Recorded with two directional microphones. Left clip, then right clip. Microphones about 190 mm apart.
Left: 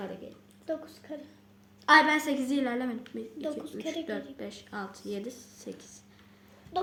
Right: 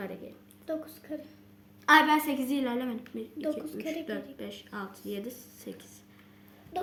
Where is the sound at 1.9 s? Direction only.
20° right (ahead or behind).